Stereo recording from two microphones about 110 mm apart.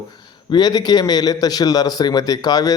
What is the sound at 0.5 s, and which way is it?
A man's voice, 40° left (ahead or behind).